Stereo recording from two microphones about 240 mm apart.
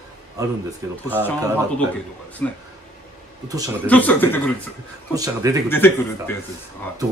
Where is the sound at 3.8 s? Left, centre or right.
Centre.